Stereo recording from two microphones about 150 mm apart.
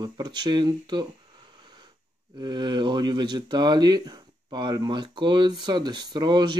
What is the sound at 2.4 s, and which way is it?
Speech, 30° right (ahead or behind).